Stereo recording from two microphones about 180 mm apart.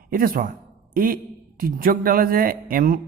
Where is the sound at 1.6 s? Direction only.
55° right (ahead or behind).